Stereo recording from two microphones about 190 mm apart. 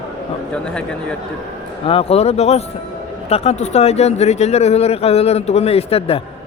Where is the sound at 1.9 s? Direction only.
30° left (ahead or behind).